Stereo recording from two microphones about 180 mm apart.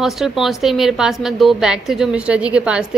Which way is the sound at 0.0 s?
Centre (ahead or behind).